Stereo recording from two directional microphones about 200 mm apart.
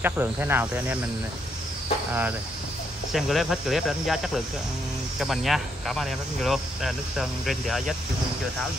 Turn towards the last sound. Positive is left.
turn(degrees=0)  # may be behind; listen again after turning